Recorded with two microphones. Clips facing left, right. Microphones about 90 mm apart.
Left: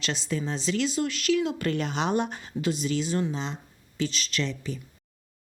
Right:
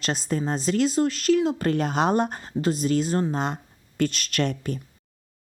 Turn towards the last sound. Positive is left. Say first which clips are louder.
# right 5 dB
turn(degrees=-55)  # may be behind; listen again after turning